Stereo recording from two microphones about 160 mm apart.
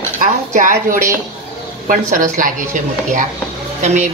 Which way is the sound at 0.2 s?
55° right (ahead or behind).